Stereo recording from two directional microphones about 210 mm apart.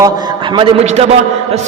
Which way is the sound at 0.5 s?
30° right (ahead or behind).